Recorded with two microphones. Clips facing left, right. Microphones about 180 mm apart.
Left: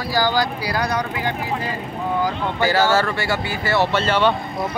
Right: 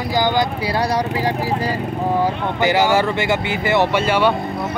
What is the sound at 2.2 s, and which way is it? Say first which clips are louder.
Speech: right 2 dB; 20° right (ahead or behind).